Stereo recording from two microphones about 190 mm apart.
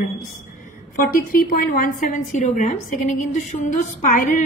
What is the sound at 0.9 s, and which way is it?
A woman's voice, 45° left (ahead or behind).